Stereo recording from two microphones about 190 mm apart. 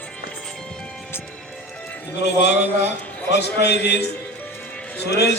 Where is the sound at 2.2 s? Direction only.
65° left (ahead or behind).